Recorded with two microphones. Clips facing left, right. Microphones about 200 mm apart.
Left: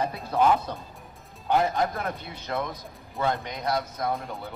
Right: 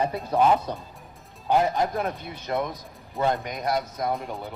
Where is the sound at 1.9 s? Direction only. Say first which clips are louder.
Right 4 dB; 15° right (ahead or behind).